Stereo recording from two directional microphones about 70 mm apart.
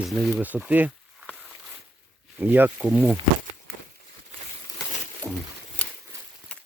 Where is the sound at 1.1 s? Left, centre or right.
Centre.